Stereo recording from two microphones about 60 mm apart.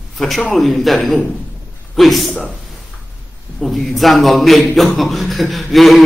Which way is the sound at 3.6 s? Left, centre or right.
Centre.